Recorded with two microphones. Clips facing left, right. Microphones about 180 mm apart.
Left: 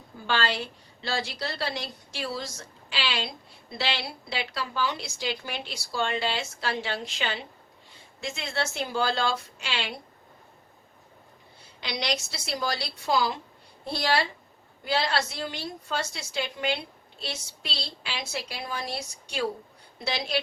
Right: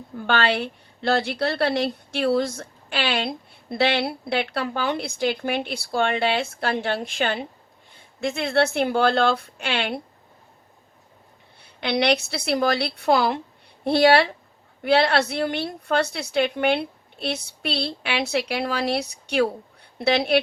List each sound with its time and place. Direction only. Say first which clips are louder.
0.2 s a woman's voice: right 6 dB; 60° right (ahead or behind)
11.6 s a woman's voice: right 11 dB; 60° right (ahead or behind)